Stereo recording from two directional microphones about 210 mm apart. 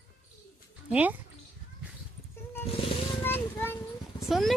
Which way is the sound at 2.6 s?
25° left (ahead or behind).